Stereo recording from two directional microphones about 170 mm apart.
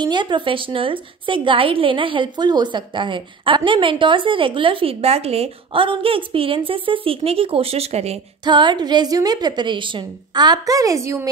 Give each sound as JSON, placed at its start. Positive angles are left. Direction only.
{"t": 0.0, "sound": "a woman's voice", "side_deg": -25}
{"t": 8.5, "sound": "a woman's voice", "side_deg": -25}